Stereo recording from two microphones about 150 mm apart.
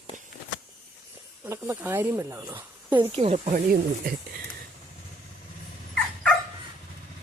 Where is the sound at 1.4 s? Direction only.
15° right (ahead or behind).